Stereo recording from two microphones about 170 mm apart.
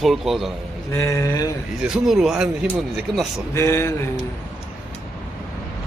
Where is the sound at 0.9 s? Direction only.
15° left (ahead or behind).